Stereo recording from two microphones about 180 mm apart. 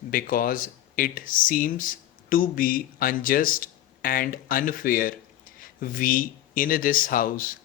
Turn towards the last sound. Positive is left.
turn(degrees=50)  # may be behind; listen again after turning